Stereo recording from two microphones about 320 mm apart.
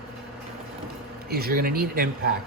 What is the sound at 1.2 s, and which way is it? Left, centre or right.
Speech, right.